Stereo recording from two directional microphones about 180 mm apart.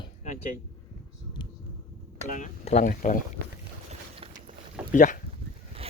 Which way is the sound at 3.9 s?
30° right (ahead or behind).